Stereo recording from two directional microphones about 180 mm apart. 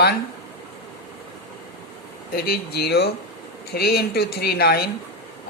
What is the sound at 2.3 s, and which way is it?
Speech, 60° left (ahead or behind).